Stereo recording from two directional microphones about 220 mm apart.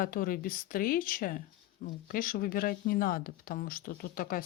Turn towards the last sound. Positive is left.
turn(degrees=40)  # may be behind; listen again after turning